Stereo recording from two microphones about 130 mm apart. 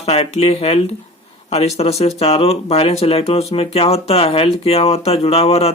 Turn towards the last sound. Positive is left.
turn(degrees=50)  # may be behind; listen again after turning